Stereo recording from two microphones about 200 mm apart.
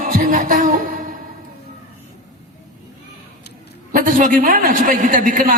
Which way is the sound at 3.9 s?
40° right (ahead or behind).